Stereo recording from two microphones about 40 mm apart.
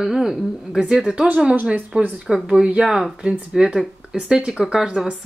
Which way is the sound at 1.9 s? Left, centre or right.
Right.